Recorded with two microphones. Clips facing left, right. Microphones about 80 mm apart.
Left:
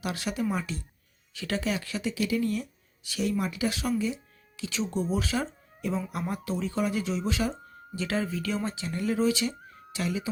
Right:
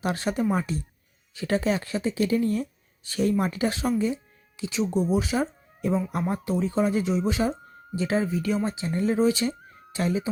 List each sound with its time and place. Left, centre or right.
0.0 s speech: right